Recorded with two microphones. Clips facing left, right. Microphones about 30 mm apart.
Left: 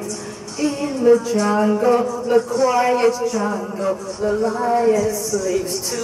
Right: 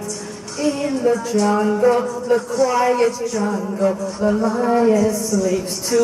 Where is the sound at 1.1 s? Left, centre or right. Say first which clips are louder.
Left 2 dB; left.